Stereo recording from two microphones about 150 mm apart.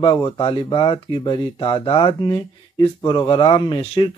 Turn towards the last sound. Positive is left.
turn(degrees=35)  # may be behind; listen again after turning